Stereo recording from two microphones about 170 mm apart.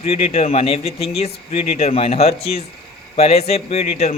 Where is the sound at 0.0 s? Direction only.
40° left (ahead or behind).